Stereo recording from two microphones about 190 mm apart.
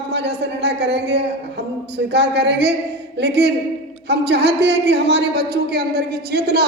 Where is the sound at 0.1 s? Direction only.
60° right (ahead or behind).